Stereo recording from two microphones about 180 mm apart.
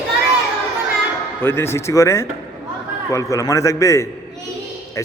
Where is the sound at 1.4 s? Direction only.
15° left (ahead or behind).